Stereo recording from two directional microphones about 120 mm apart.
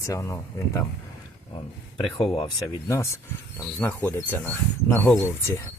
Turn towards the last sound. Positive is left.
turn(degrees=20)  # may be behind; listen again after turning